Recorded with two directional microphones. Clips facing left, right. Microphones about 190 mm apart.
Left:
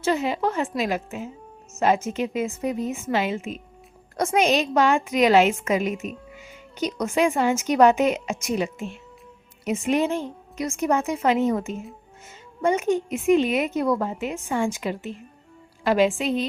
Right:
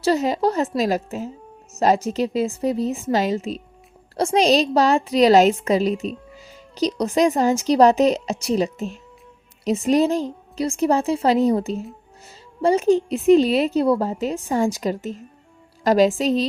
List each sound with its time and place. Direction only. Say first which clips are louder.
0.0 s speech: right 4 dB; 40° right (ahead or behind)